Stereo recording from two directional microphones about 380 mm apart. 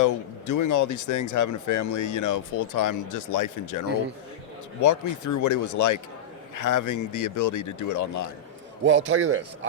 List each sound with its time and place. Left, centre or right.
0.0 s speech: left
8.8 s a man's voice: right